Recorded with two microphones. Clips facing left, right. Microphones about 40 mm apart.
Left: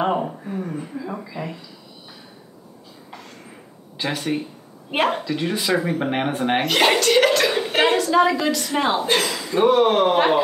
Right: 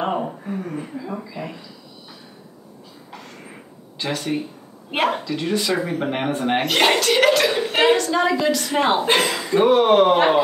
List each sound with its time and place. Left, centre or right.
0.0 s a sound: centre
0.3 s a sound: centre
0.9 s speech: centre
4.0 s speech: centre
8.6 s a woman's voice: centre
9.0 s speech: right
9.4 s speech: centre